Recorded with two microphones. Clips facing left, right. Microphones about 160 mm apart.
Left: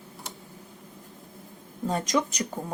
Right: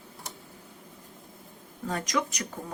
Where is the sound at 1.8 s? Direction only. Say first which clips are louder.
Left 4 dB; 25° left (ahead or behind).